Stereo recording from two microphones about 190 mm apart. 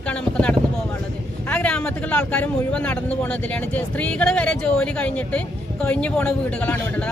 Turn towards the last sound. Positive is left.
turn(degrees=5)  # may be behind; listen again after turning